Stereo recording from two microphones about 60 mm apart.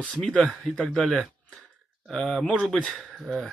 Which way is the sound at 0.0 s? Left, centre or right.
Centre.